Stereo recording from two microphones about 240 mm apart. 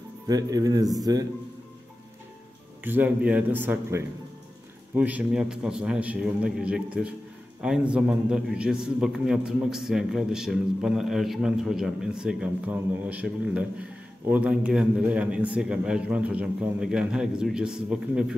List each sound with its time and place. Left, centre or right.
0.3 s speech: centre
2.8 s a man's voice: centre